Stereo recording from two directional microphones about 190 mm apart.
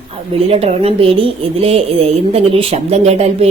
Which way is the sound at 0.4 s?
30° right (ahead or behind).